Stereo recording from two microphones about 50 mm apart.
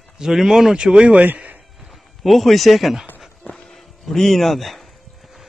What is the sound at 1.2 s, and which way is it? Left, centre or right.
Speech, right.